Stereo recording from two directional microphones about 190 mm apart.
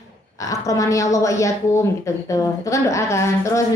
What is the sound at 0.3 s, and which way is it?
A woman's voice, 15° left (ahead or behind).